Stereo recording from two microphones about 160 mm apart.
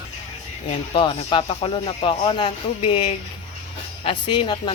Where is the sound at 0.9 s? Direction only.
30° left (ahead or behind).